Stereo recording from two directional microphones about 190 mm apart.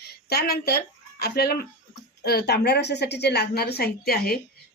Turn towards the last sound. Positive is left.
turn(degrees=55)  # may be behind; listen again after turning